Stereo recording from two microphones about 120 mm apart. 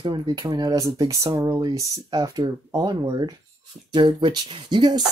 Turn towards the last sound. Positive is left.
turn(degrees=-40)  # may be behind; listen again after turning